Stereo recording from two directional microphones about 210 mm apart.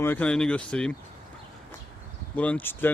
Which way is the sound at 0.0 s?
10° left (ahead or behind).